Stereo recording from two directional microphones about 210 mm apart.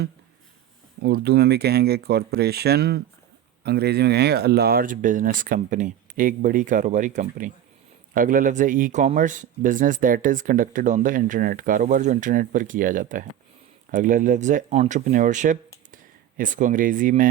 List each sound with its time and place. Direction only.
1.0 s speech: 50° right (ahead or behind)